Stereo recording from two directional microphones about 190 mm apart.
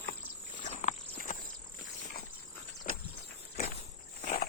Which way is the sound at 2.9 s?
45° left (ahead or behind).